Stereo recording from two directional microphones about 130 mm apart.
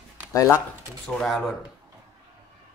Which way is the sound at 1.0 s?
5° left (ahead or behind).